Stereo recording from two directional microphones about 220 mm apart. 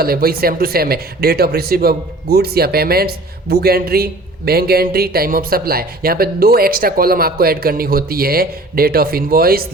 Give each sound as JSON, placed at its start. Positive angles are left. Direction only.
{"t": 0.0, "sound": "speech", "side_deg": -45}